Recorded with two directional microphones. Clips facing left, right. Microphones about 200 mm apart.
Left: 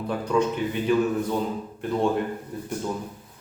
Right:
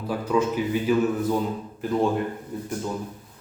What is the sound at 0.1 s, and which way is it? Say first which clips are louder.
Speech: right 1 dB; 5° right (ahead or behind).